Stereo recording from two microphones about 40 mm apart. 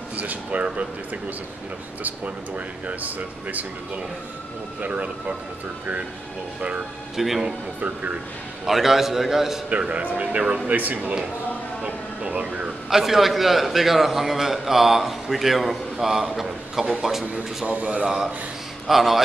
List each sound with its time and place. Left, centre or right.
0.1 s speech: right
2.0 s speech: right
7.2 s a man's voice: centre
7.4 s speech: right
8.6 s a man's voice: centre
9.7 s speech: right
11.8 s music: right
12.9 s a man's voice: centre
17.2 s speech: right
18.0 s a man's voice: centre